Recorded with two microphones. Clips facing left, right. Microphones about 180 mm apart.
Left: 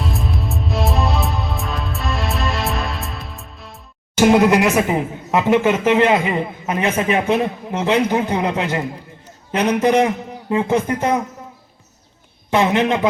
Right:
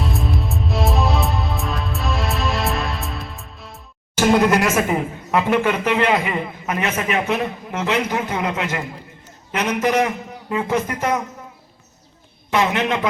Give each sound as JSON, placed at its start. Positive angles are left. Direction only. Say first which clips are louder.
{"t": 0.0, "sound": "music", "louder": "even", "side_deg": 0}
{"t": 4.2, "sound": "speech", "louder": "left 3 dB", "side_deg": 15}
{"t": 12.5, "sound": "speech", "louder": "left 3 dB", "side_deg": 30}